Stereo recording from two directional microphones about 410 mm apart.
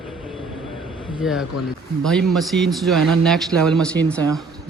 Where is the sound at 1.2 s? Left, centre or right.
Centre.